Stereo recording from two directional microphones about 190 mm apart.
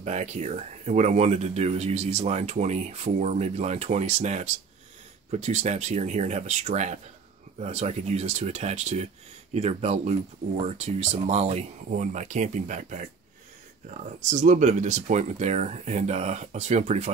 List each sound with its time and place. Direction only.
0.0 s speech: 35° right (ahead or behind)